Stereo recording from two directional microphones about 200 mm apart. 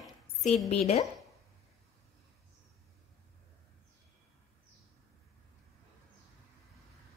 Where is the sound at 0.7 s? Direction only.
30° left (ahead or behind).